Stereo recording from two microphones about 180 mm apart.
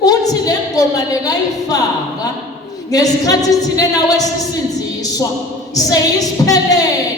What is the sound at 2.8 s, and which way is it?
A woman's voice, 20° left (ahead or behind).